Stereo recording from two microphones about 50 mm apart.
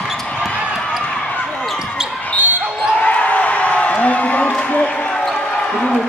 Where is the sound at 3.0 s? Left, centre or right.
Left.